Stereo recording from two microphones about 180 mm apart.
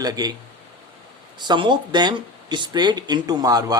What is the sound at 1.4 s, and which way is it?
Speech, 25° right (ahead or behind).